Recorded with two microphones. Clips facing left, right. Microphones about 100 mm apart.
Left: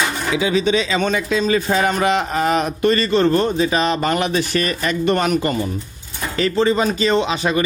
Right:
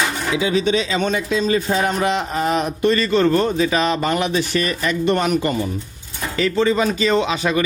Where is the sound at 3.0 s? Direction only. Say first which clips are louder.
Even; 30° left (ahead or behind).